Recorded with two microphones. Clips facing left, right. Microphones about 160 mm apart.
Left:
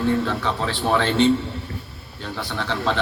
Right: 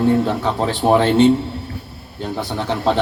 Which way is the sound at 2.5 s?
40° right (ahead or behind).